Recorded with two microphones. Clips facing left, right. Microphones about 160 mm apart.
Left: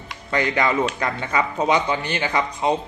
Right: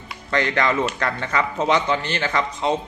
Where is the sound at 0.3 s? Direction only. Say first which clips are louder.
Even; 10° left (ahead or behind).